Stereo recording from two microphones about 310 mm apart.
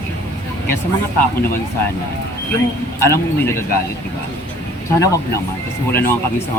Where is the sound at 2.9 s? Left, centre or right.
Centre.